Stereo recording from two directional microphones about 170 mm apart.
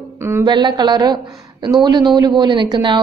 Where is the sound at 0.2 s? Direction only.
15° right (ahead or behind).